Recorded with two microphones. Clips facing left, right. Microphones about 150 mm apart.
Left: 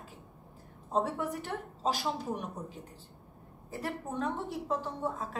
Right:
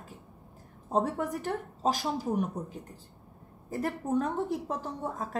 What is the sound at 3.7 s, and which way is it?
A woman's voice, 45° right (ahead or behind).